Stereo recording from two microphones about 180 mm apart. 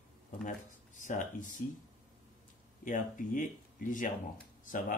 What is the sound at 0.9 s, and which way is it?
Speech, 45° left (ahead or behind).